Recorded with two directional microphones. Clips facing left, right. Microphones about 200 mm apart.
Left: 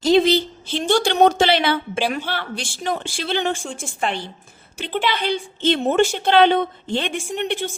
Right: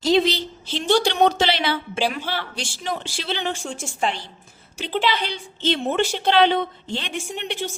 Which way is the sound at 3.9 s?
55° left (ahead or behind).